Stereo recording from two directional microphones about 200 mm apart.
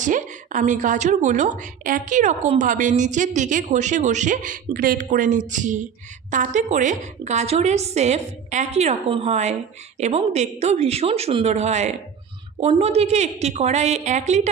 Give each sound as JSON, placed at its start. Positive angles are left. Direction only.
{"t": 0.0, "sound": "a woman's voice", "side_deg": -40}